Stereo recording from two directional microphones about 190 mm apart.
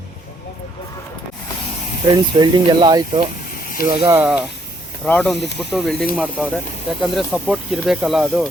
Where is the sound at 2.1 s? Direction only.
20° right (ahead or behind).